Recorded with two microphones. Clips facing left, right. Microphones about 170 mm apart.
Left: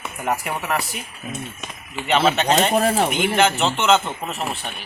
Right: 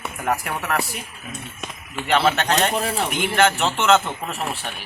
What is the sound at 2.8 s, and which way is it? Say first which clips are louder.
Speech: left 6 dB; 45° left (ahead or behind).